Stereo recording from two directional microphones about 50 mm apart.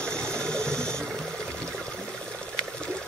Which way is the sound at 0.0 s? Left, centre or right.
Centre.